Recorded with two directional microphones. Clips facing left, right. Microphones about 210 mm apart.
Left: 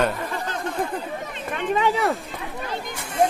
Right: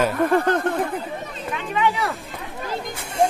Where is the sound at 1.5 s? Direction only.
45° left (ahead or behind).